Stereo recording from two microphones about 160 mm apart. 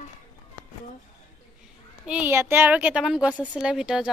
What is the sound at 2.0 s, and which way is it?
A woman's voice, 10° right (ahead or behind).